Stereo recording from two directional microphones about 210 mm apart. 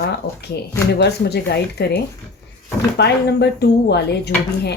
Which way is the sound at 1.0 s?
50° left (ahead or behind).